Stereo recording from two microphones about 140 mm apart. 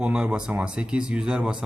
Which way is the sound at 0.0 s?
5° right (ahead or behind).